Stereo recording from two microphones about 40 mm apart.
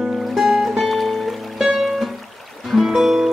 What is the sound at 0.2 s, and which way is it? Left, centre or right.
Music, centre.